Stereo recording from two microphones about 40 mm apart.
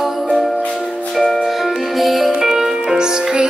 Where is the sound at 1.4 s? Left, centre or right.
Centre.